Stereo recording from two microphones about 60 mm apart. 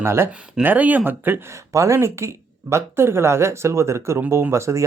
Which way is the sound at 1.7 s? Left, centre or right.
Right.